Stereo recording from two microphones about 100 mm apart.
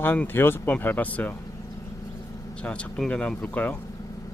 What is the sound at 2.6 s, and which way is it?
Speech, 10° left (ahead or behind).